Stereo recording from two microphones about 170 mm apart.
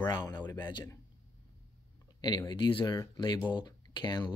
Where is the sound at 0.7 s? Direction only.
25° left (ahead or behind).